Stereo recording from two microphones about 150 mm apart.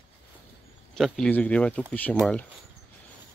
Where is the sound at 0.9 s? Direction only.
5° left (ahead or behind).